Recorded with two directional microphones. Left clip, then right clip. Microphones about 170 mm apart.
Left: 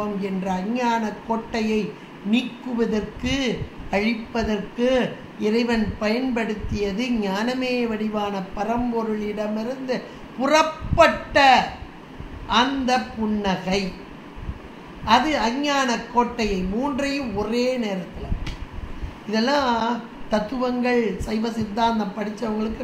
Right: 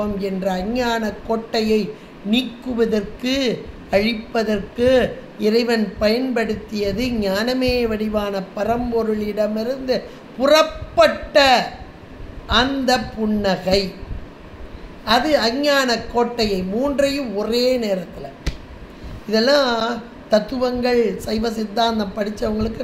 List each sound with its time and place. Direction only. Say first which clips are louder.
0.0 s a woman's voice: right 5 dB; 65° right (ahead or behind)
15.0 s a woman's voice: right 2 dB; 60° right (ahead or behind)
19.3 s a woman's voice: right 5 dB; 60° right (ahead or behind)